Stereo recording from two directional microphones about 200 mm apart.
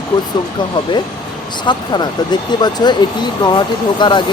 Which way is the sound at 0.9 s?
25° left (ahead or behind).